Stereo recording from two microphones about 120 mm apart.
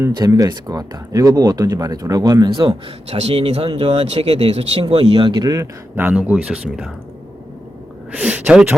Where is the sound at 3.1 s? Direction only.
60° right (ahead or behind).